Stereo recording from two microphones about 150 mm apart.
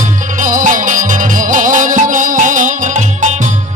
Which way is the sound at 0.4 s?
60° right (ahead or behind).